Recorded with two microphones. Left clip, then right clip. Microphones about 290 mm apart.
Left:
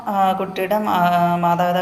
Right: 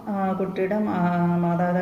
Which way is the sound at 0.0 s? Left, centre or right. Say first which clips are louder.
Left 8 dB; left.